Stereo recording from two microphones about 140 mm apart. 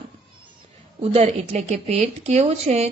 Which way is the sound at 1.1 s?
50° right (ahead or behind).